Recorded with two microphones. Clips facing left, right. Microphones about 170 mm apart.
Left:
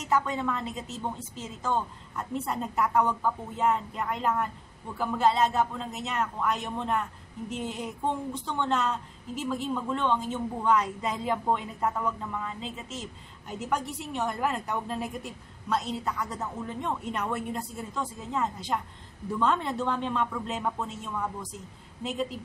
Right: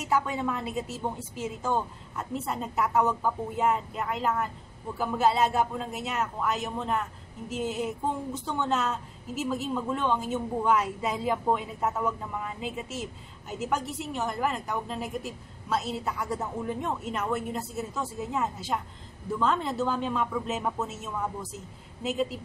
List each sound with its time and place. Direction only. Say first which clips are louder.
0.0 s a woman's voice: even; 10° right (ahead or behind)